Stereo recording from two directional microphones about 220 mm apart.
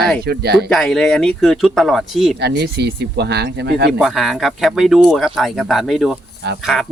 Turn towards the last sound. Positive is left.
turn(degrees=0)  # may be behind; listen again after turning